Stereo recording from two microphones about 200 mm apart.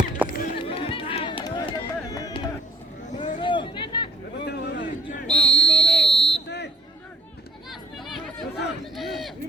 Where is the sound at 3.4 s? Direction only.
25° left (ahead or behind).